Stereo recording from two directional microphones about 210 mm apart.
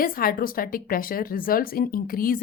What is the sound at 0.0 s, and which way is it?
A woman's voice, 45° left (ahead or behind).